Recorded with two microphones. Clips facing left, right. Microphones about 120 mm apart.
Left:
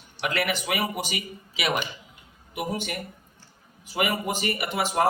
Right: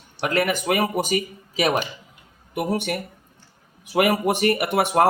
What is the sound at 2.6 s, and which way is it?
A man's voice, 60° right (ahead or behind).